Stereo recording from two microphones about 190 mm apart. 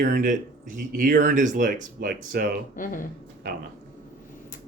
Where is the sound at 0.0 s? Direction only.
45° right (ahead or behind).